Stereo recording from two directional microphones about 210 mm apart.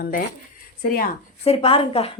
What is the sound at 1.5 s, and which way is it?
Speech, 25° left (ahead or behind).